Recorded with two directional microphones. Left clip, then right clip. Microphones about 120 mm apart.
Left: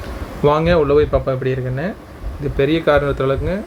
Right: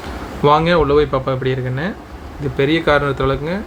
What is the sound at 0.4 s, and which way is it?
Speech, 10° left (ahead or behind).